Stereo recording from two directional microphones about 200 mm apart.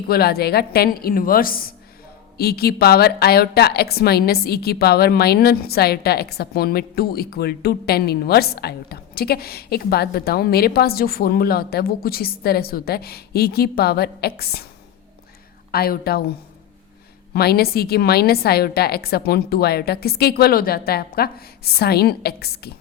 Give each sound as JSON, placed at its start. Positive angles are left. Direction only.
{"t": 0.1, "sound": "a woman's voice", "side_deg": 50}
{"t": 15.7, "sound": "a woman's voice", "side_deg": 50}
{"t": 17.3, "sound": "a woman's voice", "side_deg": 50}